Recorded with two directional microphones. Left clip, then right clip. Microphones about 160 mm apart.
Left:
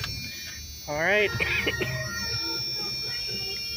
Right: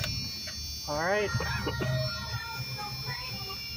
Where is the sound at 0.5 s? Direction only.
Centre (ahead or behind).